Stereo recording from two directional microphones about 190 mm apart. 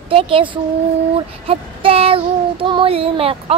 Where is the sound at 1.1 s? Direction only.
30° right (ahead or behind).